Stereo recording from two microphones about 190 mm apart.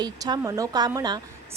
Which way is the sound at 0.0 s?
20° right (ahead or behind).